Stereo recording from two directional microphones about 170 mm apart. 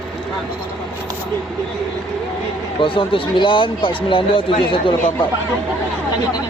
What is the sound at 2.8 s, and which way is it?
Speech, 30° left (ahead or behind).